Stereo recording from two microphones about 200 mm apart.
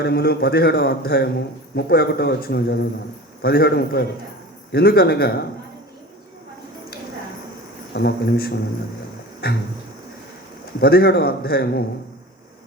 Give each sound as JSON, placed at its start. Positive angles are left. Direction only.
{"t": 0.0, "sound": "a man's voice", "side_deg": 50}
{"t": 7.9, "sound": "a man's voice", "side_deg": 50}
{"t": 10.8, "sound": "a man's voice", "side_deg": 50}